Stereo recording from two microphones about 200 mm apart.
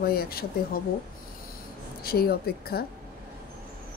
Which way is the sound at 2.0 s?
50° left (ahead or behind).